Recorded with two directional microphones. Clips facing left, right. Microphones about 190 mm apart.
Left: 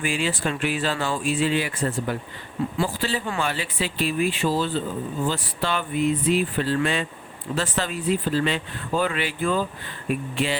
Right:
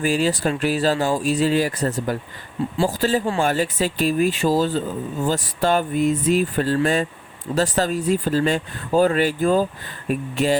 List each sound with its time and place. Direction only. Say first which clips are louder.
0.0 s speech: right 5 dB; 40° right (ahead or behind)